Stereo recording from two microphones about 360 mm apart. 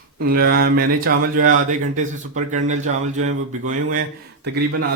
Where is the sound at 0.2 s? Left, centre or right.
Right.